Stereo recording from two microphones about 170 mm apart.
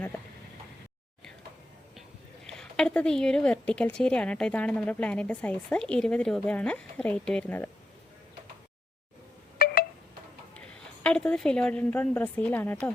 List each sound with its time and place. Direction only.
2.0 s a woman's voice: 5° left (ahead or behind)
9.6 s a sound: 65° left (ahead or behind)
11.0 s a woman's voice: 5° left (ahead or behind)